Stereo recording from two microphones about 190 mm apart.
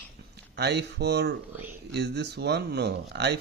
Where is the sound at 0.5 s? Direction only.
60° right (ahead or behind).